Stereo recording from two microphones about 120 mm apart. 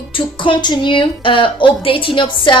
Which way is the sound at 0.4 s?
40° left (ahead or behind).